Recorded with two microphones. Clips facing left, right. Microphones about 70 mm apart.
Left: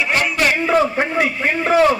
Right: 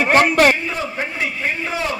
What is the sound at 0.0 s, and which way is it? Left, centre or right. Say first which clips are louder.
Speech: right 5 dB; right.